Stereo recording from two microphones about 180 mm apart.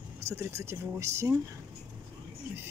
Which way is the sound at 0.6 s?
15° right (ahead or behind).